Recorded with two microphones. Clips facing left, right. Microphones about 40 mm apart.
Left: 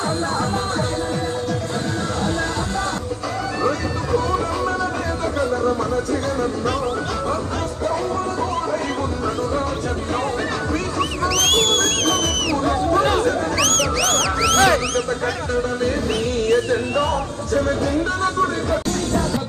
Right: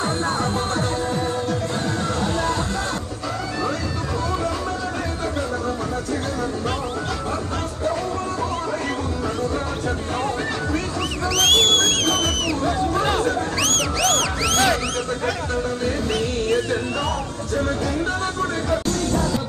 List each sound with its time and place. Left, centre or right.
11.3 s music: right
13.1 s a sound: left
13.7 s music: left
18.9 s music: left